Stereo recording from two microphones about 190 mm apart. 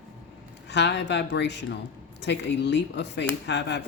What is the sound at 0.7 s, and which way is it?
Speech, 65° left (ahead or behind).